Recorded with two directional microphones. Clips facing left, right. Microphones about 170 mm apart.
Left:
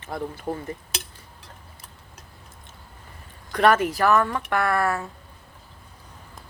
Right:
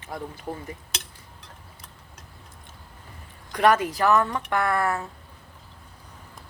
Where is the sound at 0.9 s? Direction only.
5° left (ahead or behind).